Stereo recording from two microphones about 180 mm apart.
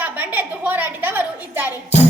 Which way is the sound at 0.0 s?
10° right (ahead or behind).